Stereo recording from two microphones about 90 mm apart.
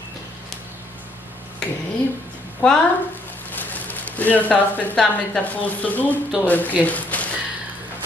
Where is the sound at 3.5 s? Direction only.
20° left (ahead or behind).